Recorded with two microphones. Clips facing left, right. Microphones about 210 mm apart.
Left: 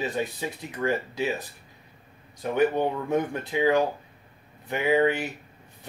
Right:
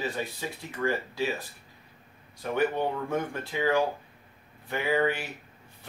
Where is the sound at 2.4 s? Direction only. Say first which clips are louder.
Left 4 dB; 15° left (ahead or behind).